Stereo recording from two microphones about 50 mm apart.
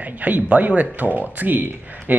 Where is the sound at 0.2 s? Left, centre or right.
Right.